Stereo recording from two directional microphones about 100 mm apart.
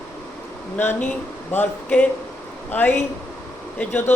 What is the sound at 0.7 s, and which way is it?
Speech, 20° left (ahead or behind).